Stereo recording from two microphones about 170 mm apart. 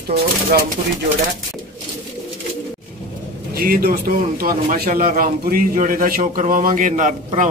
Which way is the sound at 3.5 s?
60° right (ahead or behind).